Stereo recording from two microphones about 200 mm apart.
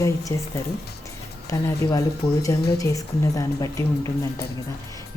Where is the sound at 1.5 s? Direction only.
20° left (ahead or behind).